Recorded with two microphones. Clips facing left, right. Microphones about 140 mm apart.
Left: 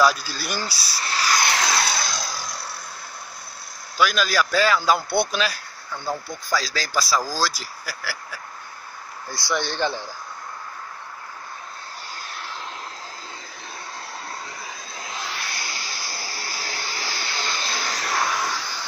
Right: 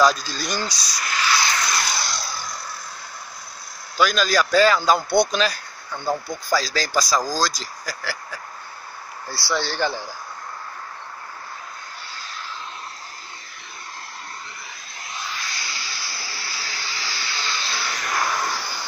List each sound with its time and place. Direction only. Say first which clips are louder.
0.0 s speech: right 1 dB; 10° left (ahead or behind)
0.9 s a sound: even; 35° left (ahead or behind)
1.4 s a sound: left 2 dB; 85° left
4.0 s speech: right 2 dB; 5° left (ahead or behind)
9.3 s speech: right 1 dB; 20° left (ahead or behind)
12.2 s vehicle: right 1 dB; 65° left (ahead or behind)
15.1 s vacuum cleaner: even; 75° left (ahead or behind); by 18.1 s 35° left (ahead or behind)